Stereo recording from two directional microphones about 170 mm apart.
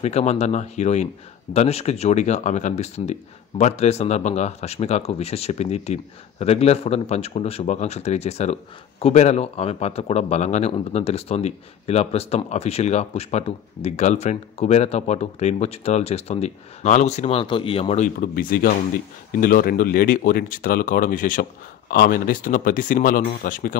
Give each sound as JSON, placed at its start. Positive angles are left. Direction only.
{"t": 0.0, "sound": "speech", "side_deg": 40}